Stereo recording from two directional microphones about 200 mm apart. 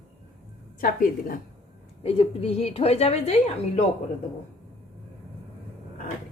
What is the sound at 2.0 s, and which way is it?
A woman's voice, 30° left (ahead or behind).